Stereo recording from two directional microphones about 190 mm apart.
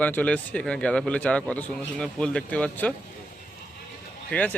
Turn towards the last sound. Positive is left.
turn(degrees=10)  # may be behind; listen again after turning